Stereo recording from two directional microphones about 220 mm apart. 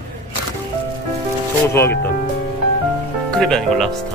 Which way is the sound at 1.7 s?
10° left (ahead or behind).